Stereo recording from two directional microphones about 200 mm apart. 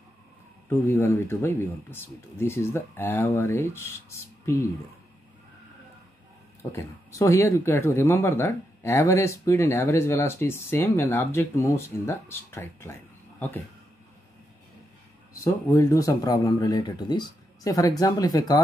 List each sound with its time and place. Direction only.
0.7 s speech: 10° left (ahead or behind)
6.6 s speech: 15° left (ahead or behind)
15.4 s speech: 15° left (ahead or behind)